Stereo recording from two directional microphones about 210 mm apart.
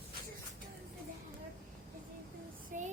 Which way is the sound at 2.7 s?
40° right (ahead or behind).